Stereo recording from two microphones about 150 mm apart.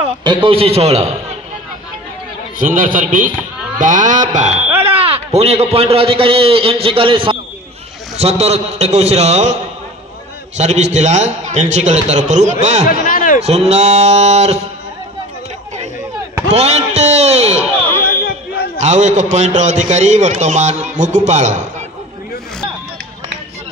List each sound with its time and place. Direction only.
0.0 s a man's voice: 30° right (ahead or behind)
2.6 s speech: 65° right (ahead or behind)
5.0 s a man's voice: 40° right (ahead or behind)
10.6 s a man's voice: 50° right (ahead or behind)
12.8 s a man's voice: 70° left (ahead or behind)
13.4 s a man's voice: 45° right (ahead or behind)
16.4 s a sound: 45° right (ahead or behind)
18.0 s a sound: 85° left
18.8 s a man's voice: 50° right (ahead or behind)